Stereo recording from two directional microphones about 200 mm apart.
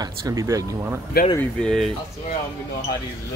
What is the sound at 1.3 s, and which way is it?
Speech, 5° left (ahead or behind).